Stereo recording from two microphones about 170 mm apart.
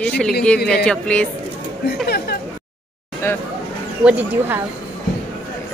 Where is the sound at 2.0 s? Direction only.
70° left (ahead or behind).